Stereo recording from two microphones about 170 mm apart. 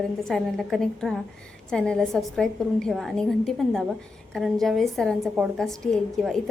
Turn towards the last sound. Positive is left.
turn(degrees=0)  # may be behind; listen again after turning